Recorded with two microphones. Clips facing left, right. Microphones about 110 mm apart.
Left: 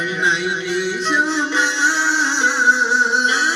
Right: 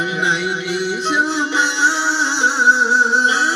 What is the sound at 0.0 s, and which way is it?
Music, 20° right (ahead or behind).